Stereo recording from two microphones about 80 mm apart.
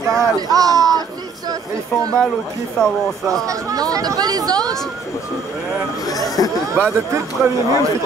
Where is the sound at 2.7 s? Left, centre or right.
Centre.